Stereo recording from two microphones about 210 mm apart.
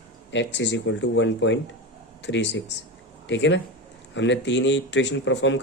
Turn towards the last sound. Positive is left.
turn(degrees=60)  # may be behind; listen again after turning